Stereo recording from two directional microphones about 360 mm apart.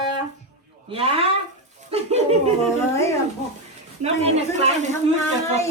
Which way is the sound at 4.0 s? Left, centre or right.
Centre.